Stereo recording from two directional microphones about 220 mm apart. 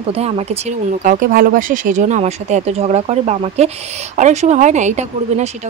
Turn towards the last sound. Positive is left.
turn(degrees=-30)  # may be behind; listen again after turning